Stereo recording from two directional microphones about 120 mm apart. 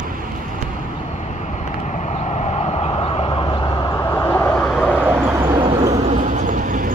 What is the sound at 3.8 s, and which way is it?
Vehicle, 25° left (ahead or behind).